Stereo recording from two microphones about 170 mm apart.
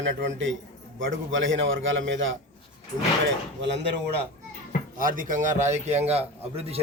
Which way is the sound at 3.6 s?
90° right.